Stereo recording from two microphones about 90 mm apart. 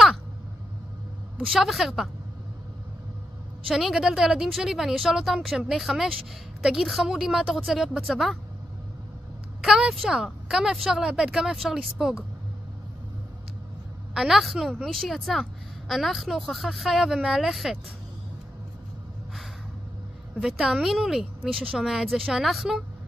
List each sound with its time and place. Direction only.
1.5 s a woman's voice: centre (ahead or behind)
3.6 s a woman's voice: 5° right (ahead or behind)
9.6 s a woman's voice: 5° right (ahead or behind)
14.1 s a woman's voice: 5° right (ahead or behind)
20.3 s a woman's voice: 5° right (ahead or behind)